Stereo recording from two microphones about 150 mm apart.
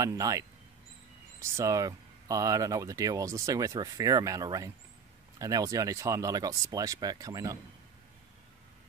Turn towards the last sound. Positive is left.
turn(degrees=-25)  # may be behind; listen again after turning